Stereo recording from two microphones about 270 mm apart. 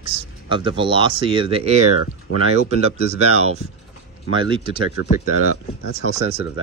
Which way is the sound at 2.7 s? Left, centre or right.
Right.